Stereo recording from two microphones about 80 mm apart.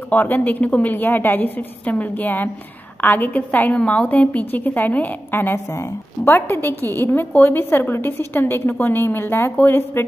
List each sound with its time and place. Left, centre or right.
0.1 s a woman's voice: left